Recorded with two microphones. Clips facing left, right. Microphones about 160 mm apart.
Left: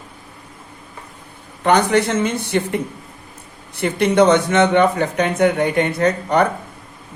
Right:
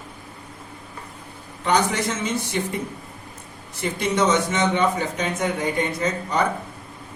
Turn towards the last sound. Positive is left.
turn(degrees=65)  # may be behind; listen again after turning